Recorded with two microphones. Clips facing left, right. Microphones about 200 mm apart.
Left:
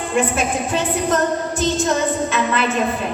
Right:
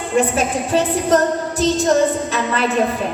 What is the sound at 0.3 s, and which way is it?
Music, 35° right (ahead or behind).